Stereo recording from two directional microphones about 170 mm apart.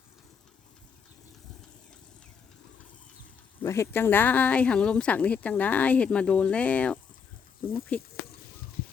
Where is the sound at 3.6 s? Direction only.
15° left (ahead or behind).